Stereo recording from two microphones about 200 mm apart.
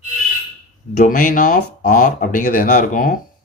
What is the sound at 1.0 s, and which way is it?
A man's voice, 40° left (ahead or behind).